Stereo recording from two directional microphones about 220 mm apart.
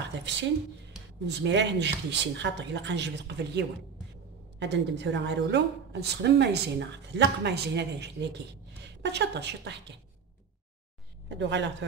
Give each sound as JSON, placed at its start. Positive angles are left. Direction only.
{"t": 0.2, "sound": "a woman's voice", "side_deg": -55}
{"t": 11.2, "sound": "speech", "side_deg": -55}